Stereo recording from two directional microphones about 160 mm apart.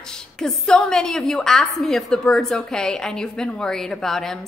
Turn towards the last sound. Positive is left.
turn(degrees=0)  # may be behind; listen again after turning